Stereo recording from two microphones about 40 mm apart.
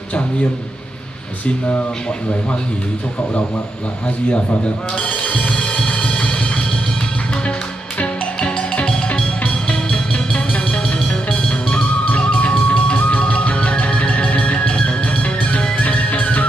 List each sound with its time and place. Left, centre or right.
4.9 s speech: left
5.5 s music: left
8.4 s music: left